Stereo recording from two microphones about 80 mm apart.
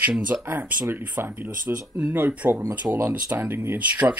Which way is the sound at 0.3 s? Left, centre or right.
Right.